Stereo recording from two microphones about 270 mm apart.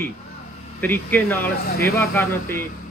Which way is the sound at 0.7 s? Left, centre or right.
Centre.